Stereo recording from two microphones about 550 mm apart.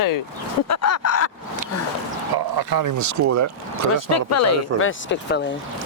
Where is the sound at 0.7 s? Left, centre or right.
Left.